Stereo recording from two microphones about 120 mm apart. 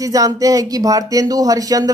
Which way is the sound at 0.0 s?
30° right (ahead or behind).